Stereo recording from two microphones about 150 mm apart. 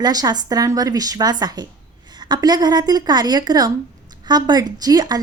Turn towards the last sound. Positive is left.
turn(degrees=-25)  # may be behind; listen again after turning